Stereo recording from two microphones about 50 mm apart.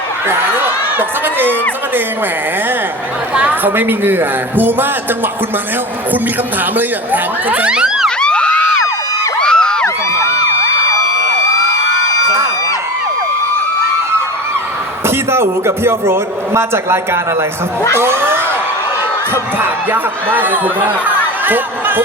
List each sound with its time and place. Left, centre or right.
0.3 s speech: right
3.3 s speech: right
6.7 s speech: right
7.6 s police car: centre
8.2 s crowd: centre
15.0 s a man's voice: right